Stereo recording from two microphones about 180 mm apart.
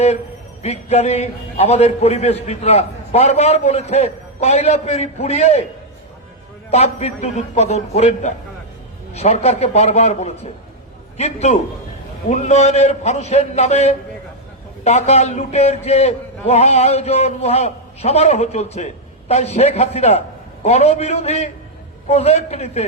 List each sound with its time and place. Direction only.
0.6 s a man's voice: 35° left (ahead or behind)
6.7 s a man's voice: 35° left (ahead or behind)